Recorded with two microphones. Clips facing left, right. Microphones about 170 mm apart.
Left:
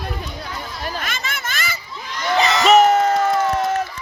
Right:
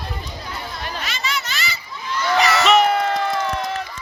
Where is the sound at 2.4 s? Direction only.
20° left (ahead or behind).